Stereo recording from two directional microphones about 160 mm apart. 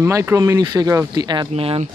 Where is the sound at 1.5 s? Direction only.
40° right (ahead or behind).